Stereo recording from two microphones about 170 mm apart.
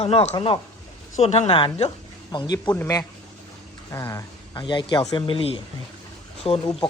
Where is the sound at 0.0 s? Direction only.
35° left (ahead or behind).